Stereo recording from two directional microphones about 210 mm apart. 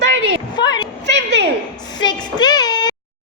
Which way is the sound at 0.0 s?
60° right (ahead or behind).